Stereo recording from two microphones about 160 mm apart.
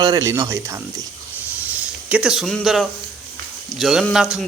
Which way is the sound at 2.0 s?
5° right (ahead or behind).